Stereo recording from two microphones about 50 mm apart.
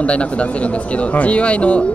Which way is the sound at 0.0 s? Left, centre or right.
Left.